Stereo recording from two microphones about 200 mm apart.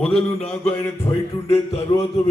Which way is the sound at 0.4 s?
10° left (ahead or behind).